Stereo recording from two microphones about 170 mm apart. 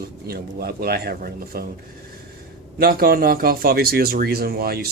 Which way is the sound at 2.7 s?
60° right (ahead or behind).